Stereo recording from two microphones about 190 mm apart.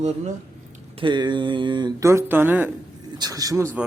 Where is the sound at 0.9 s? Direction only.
25° right (ahead or behind).